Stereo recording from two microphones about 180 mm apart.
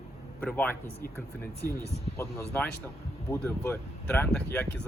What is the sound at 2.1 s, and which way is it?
Speech, 15° left (ahead or behind).